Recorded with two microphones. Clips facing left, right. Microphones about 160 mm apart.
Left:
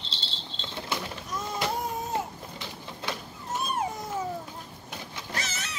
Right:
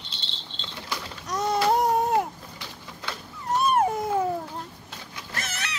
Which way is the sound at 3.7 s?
55° right (ahead or behind).